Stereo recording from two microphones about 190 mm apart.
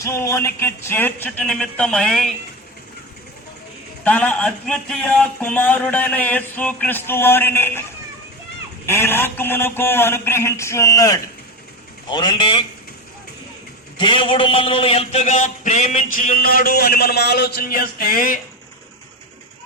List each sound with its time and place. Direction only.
0.0 s speech: 15° left (ahead or behind)
4.0 s speech: 5° left (ahead or behind)
8.9 s speech: 10° left (ahead or behind)
14.0 s a sound: 25° left (ahead or behind); by 18.3 s 50° left (ahead or behind)